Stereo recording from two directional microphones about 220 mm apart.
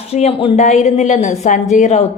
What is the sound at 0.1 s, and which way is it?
A woman's voice, 25° left (ahead or behind).